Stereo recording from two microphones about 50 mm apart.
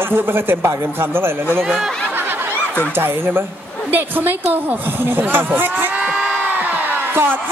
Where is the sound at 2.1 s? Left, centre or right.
Right.